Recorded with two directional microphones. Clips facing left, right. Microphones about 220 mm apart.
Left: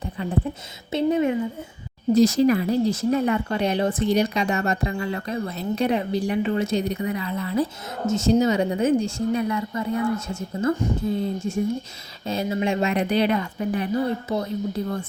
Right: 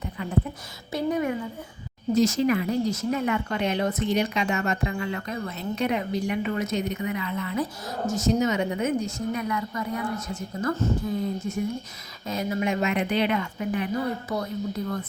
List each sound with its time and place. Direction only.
0.0 s a sound: 30° left (ahead or behind)
0.9 s speech: 25° left (ahead or behind)
2.1 s speech: 35° left (ahead or behind)